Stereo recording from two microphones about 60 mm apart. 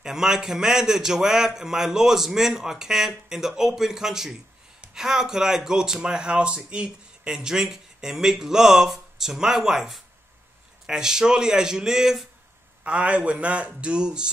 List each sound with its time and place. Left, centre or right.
0.0 s speech: centre
12.8 s speech: right